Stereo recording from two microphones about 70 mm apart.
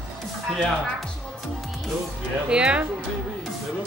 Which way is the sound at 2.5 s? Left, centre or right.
Centre.